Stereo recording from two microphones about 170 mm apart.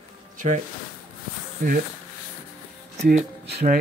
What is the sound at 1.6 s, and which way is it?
Speech, 50° right (ahead or behind).